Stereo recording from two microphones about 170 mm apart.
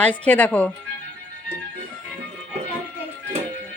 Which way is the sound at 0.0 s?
10° left (ahead or behind).